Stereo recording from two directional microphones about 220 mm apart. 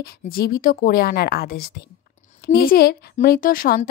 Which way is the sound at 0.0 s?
45° left (ahead or behind).